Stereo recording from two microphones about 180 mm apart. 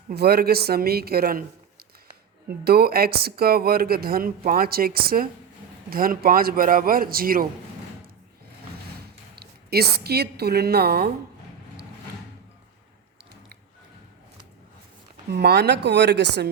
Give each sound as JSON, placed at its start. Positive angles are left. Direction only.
{"t": 0.1, "sound": "speech", "side_deg": -60}
{"t": 2.6, "sound": "a man's voice", "side_deg": -60}
{"t": 9.0, "sound": "a woman's voice", "side_deg": -60}
{"t": 15.3, "sound": "speech", "side_deg": -65}